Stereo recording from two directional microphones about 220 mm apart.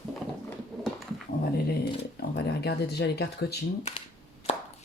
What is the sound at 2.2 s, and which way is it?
Speech, 45° left (ahead or behind).